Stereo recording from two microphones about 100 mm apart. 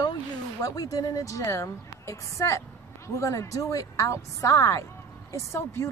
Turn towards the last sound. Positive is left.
turn(degrees=25)  # may be behind; listen again after turning